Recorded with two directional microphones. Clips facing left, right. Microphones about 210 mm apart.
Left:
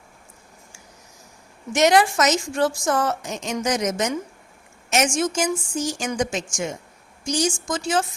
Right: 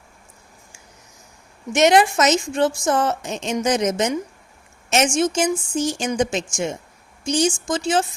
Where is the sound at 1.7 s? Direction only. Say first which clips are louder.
Right 2 dB; 20° right (ahead or behind).